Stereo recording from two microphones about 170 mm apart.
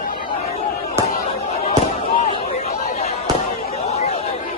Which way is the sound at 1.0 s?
35° left (ahead or behind).